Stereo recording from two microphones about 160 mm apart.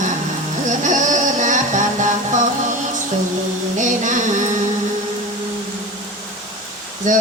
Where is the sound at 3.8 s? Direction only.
50° right (ahead or behind).